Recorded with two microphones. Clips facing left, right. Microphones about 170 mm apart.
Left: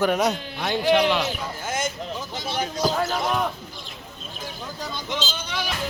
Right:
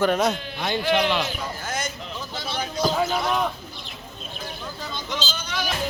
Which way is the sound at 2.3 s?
15° left (ahead or behind).